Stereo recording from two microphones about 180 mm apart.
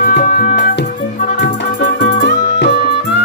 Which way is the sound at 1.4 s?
70° left (ahead or behind).